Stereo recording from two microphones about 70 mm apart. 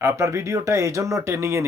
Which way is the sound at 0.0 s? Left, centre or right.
Right.